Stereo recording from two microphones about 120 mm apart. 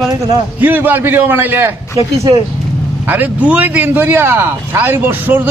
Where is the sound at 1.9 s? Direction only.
30° right (ahead or behind).